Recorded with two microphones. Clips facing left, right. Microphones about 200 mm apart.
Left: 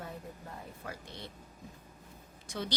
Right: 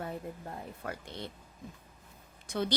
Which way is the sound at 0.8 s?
55° right (ahead or behind).